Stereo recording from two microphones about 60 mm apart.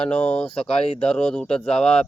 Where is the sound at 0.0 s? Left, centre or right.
Centre.